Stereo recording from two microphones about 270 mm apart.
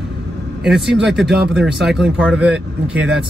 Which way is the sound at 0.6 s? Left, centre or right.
Centre.